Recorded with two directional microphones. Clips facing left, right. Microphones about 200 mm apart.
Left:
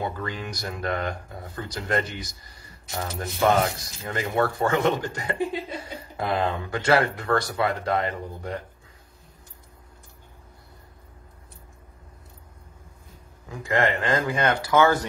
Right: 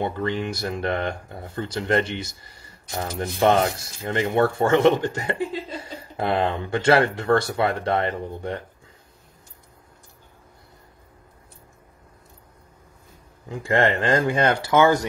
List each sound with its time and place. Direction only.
0.0 s speech: 25° right (ahead or behind)
5.4 s chuckle: 15° left (ahead or behind)
6.1 s speech: 25° right (ahead or behind)
13.6 s speech: 30° right (ahead or behind)